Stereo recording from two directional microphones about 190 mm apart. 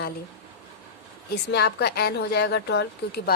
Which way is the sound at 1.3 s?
60° left (ahead or behind).